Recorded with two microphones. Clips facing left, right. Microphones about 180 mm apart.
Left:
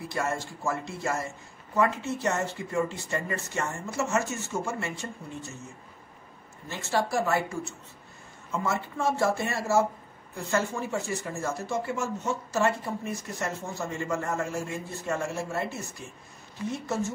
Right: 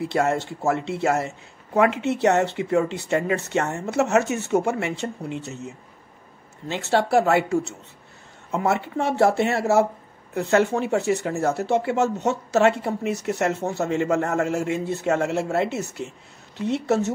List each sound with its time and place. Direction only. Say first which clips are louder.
0.0 s speech: right 8 dB; 65° right (ahead or behind)